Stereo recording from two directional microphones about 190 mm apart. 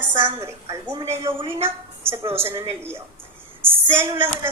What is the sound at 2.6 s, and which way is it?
A woman's voice, 15° right (ahead or behind).